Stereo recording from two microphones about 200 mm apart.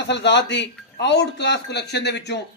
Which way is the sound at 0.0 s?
60° left (ahead or behind).